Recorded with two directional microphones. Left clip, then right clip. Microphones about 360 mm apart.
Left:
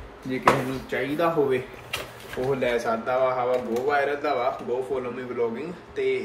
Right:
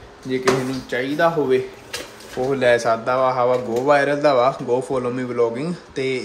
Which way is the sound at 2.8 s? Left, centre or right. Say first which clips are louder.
Right 5 dB; centre.